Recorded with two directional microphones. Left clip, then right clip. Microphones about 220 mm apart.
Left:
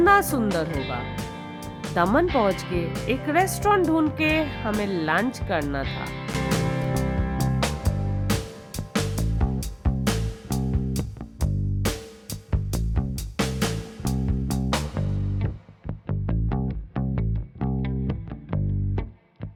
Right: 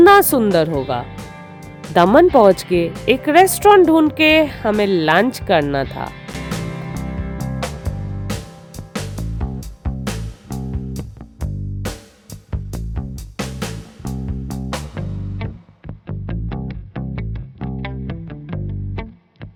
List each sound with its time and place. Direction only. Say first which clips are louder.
0.0 s speech: right 9 dB; 40° right (ahead or behind)
1.1 s music: even; centre (ahead or behind)
2.0 s speech: right 11 dB; 40° right (ahead or behind)
6.2 s music: left 1 dB; centre (ahead or behind)